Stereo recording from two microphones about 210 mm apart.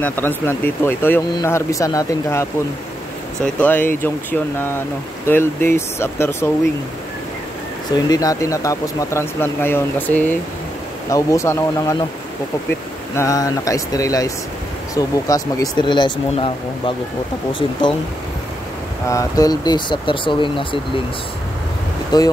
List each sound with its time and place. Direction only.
0.0 s speech: 10° left (ahead or behind)
7.9 s speech: 15° left (ahead or behind)
13.1 s speech: 15° left (ahead or behind)
19.0 s speech: 15° left (ahead or behind)
22.1 s speech: 20° left (ahead or behind)